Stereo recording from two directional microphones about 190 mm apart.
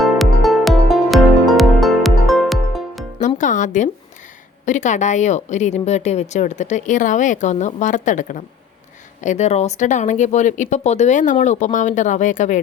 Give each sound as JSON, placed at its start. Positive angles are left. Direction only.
{"t": 0.0, "sound": "music", "side_deg": 0}
{"t": 3.2, "sound": "music", "side_deg": 40}
{"t": 4.6, "sound": "a woman's voice", "side_deg": 40}